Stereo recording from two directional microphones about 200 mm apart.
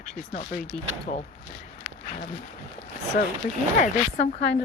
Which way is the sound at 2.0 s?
40° left (ahead or behind).